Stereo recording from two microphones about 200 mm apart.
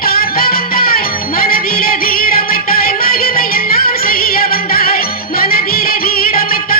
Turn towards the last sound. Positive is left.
turn(degrees=45)  # may be behind; listen again after turning